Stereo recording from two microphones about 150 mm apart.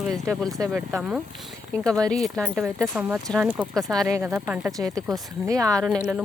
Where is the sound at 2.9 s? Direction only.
15° right (ahead or behind).